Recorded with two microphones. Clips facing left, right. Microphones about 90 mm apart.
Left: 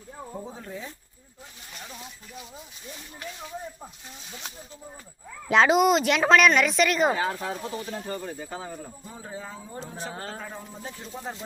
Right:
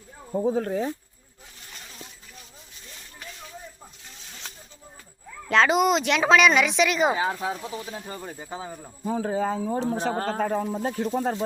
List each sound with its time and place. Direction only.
0.3 s speech: 60° right (ahead or behind)
1.7 s a sound: 5° left (ahead or behind)
4.3 s snake: 15° left (ahead or behind)
5.5 s speech: 5° left (ahead or behind); by 8.9 s 15° right (ahead or behind)
9.0 s speech: 85° right; by 11.4 s 65° right (ahead or behind)